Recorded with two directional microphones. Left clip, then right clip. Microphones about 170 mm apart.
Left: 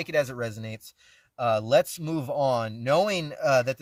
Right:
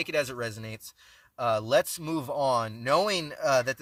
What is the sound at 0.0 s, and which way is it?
Speech, 20° right (ahead or behind).